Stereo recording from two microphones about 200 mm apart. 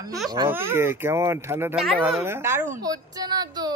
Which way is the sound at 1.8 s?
Centre (ahead or behind).